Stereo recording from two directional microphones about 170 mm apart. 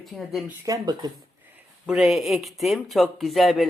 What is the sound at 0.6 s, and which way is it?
Speech, 20° right (ahead or behind).